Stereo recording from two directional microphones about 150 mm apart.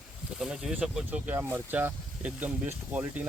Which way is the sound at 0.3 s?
5° right (ahead or behind).